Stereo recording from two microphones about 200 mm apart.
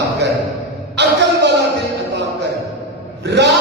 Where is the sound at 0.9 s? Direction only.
60° right (ahead or behind).